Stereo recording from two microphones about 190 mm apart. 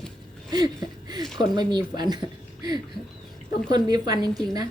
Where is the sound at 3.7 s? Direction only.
20° right (ahead or behind).